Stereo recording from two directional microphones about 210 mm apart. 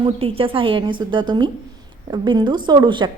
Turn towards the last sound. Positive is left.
turn(degrees=-20)  # may be behind; listen again after turning